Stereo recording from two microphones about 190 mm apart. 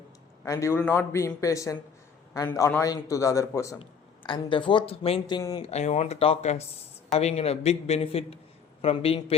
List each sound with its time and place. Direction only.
0.4 s a man's voice: 15° left (ahead or behind)
3.8 s speech: 25° left (ahead or behind)
5.6 s a man's voice: 35° left (ahead or behind)